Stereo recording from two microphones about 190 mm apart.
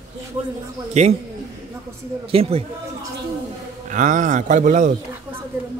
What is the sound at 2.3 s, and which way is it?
Speech, 30° right (ahead or behind).